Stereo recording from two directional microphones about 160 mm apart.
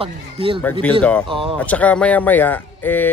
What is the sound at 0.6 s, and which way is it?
Speech, 5° left (ahead or behind).